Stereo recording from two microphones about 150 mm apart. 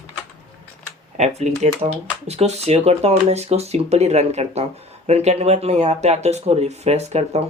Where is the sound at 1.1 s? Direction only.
50° right (ahead or behind).